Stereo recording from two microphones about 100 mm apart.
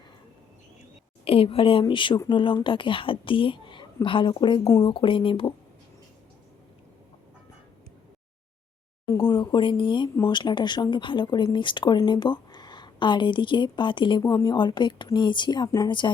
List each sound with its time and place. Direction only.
1.2 s a woman's voice: 70° left (ahead or behind)
9.3 s speech: 50° left (ahead or behind)
14.2 s speech: 35° left (ahead or behind)
14.5 s speech: 50° left (ahead or behind)